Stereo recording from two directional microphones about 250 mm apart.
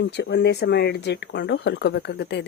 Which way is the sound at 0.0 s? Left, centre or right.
Left.